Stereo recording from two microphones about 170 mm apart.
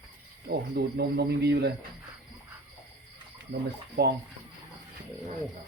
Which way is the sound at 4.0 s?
70° right (ahead or behind).